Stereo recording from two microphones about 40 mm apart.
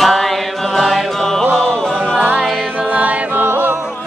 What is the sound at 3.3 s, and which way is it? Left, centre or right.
Music, right.